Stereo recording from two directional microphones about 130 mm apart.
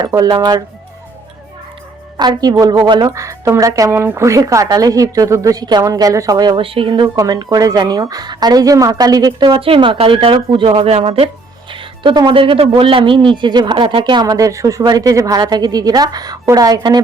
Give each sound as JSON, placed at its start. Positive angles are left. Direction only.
{"t": 0.0, "sound": "a woman's voice", "side_deg": -30}
{"t": 2.1, "sound": "a woman's voice", "side_deg": -30}
{"t": 6.6, "sound": "a man's voice", "side_deg": -45}
{"t": 9.6, "sound": "speech", "side_deg": -45}
{"t": 11.7, "sound": "a man's voice", "side_deg": -40}